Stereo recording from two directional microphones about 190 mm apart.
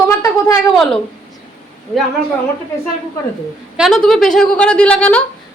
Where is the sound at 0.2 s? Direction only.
15° left (ahead or behind).